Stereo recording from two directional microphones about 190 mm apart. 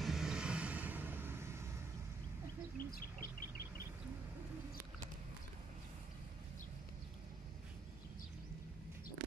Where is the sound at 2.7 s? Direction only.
50° left (ahead or behind).